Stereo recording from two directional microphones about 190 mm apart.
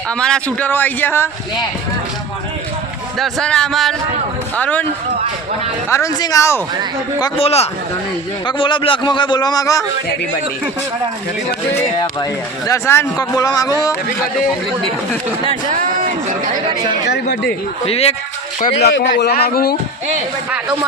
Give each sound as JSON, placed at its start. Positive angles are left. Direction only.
{"t": 0.1, "sound": "speech", "side_deg": 5}
{"t": 3.2, "sound": "speech", "side_deg": 0}
{"t": 5.9, "sound": "speech", "side_deg": 15}
{"t": 7.2, "sound": "a man's voice", "side_deg": 30}
{"t": 11.9, "sound": "speech", "side_deg": 20}
{"t": 17.8, "sound": "a man's voice", "side_deg": 30}
{"t": 18.7, "sound": "a man's voice", "side_deg": 65}